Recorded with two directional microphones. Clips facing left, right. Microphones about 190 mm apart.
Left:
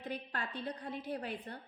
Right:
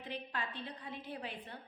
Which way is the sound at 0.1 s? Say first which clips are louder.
Left 1 dB; 45° left (ahead or behind).